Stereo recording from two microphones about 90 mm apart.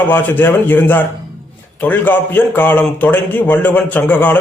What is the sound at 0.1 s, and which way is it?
A man's voice, 20° left (ahead or behind).